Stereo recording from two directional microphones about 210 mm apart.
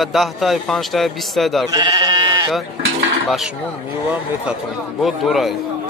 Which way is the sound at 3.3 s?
Centre (ahead or behind).